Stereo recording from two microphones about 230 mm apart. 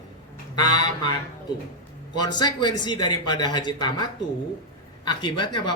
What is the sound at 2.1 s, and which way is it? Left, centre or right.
A man's voice, centre.